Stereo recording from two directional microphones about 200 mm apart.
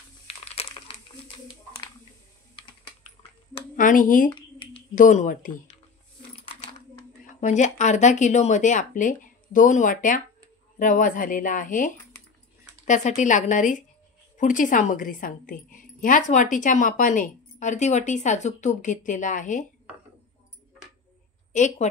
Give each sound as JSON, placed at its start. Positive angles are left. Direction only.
{"t": 0.3, "sound": "crumpling", "side_deg": 30}
{"t": 3.7, "sound": "speech", "side_deg": 40}
{"t": 4.4, "sound": "a sound", "side_deg": 25}
{"t": 4.9, "sound": "a woman's voice", "side_deg": 40}
{"t": 7.3, "sound": "a woman's voice", "side_deg": 35}
{"t": 21.5, "sound": "a woman's voice", "side_deg": 35}